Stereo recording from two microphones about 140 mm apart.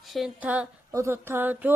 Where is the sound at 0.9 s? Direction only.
20° right (ahead or behind).